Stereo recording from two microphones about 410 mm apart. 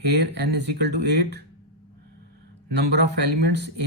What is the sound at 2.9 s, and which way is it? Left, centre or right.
Speech, right.